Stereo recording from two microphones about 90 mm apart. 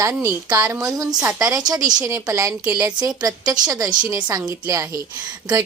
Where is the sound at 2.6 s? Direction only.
15° right (ahead or behind).